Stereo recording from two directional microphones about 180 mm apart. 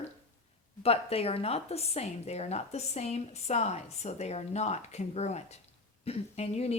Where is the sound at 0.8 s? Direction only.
35° left (ahead or behind).